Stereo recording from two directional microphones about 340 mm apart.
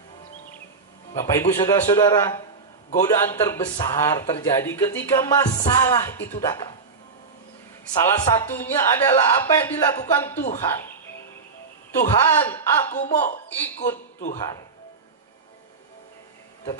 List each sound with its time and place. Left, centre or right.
1.1 s speech: centre
7.9 s speech: centre
12.0 s speech: centre